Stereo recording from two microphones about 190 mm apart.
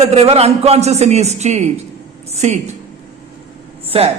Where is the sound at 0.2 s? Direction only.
35° right (ahead or behind).